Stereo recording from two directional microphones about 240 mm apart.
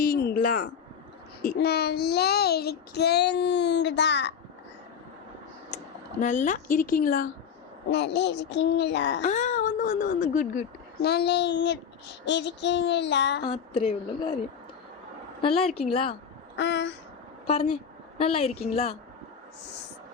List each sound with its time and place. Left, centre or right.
0.0 s a sound: left
1.4 s child singing: left
5.7 s speech: left
7.9 s child singing: left
9.2 s speech: left
11.0 s child singing: left
13.4 s a woman's voice: left
15.4 s a woman's voice: left
16.6 s child singing: left
17.4 s a woman's voice: left